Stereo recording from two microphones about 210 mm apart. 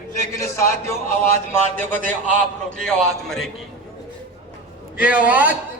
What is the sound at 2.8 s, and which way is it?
Speech, centre (ahead or behind).